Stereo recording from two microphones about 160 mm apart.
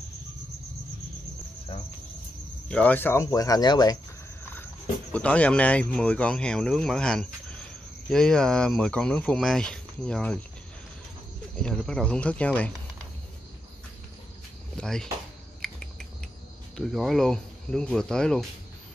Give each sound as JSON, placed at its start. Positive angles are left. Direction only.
{"t": 2.7, "sound": "speech", "side_deg": 10}
{"t": 5.1, "sound": "speech", "side_deg": 10}
{"t": 11.5, "sound": "speech", "side_deg": 5}
{"t": 14.8, "sound": "speech", "side_deg": 5}
{"t": 15.6, "sound": "a sound", "side_deg": 5}
{"t": 16.7, "sound": "speech", "side_deg": 0}